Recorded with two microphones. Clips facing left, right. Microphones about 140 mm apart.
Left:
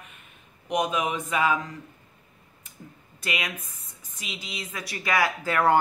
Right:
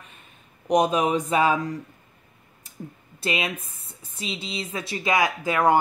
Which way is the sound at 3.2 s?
30° right (ahead or behind).